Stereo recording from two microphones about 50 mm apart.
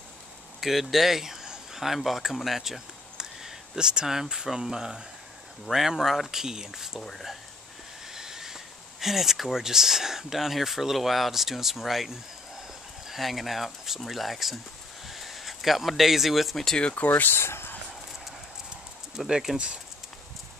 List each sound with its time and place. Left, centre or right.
0.6 s speech: centre
7.0 s speech: centre
8.1 s train: centre
9.0 s speech: centre
16.8 s speech: left
17.1 s speech: left
19.1 s speech: centre